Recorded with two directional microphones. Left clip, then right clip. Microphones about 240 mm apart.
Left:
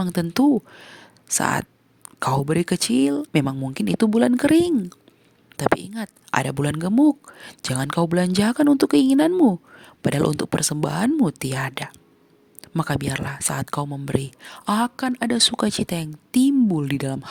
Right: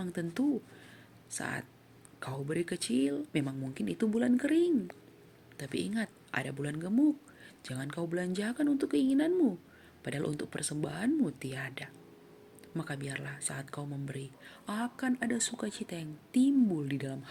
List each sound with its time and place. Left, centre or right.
0.0 s speech: left